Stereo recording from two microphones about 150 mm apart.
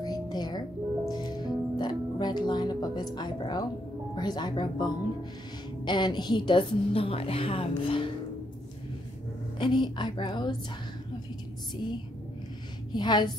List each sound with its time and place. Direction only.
0.0 s music: 25° left (ahead or behind)
3.2 s a woman's voice: 30° left (ahead or behind)
9.6 s a woman's voice: 30° left (ahead or behind)
12.9 s speech: 30° left (ahead or behind)